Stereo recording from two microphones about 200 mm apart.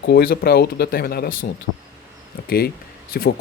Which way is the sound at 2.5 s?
50° left (ahead or behind).